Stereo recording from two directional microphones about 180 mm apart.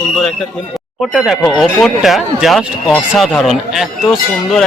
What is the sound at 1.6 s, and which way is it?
Speech, centre (ahead or behind).